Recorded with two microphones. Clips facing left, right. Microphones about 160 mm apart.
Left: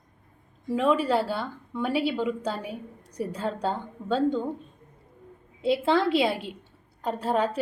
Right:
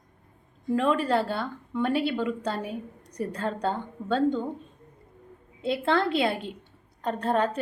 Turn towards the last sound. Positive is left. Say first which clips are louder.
# even
turn(degrees=5)  # may be behind; listen again after turning